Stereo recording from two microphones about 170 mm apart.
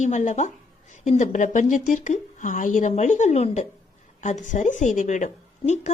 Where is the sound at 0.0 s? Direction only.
45° left (ahead or behind).